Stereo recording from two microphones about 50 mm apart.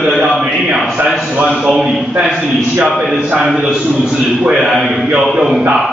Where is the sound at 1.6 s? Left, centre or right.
Centre.